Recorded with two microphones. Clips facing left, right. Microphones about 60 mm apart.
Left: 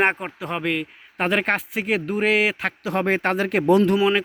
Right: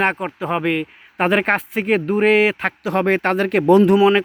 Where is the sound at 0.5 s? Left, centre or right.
Centre.